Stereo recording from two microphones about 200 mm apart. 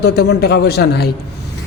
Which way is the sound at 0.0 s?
55° left (ahead or behind).